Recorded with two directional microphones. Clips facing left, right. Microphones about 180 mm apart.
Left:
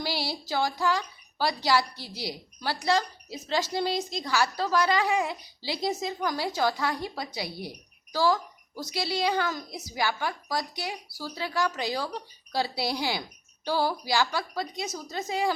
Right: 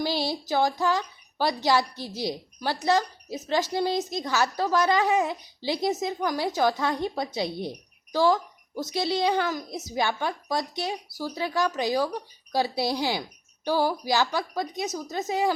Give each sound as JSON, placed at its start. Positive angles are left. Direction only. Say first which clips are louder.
{"t": 0.0, "sound": "speech", "louder": "right 5 dB", "side_deg": -20}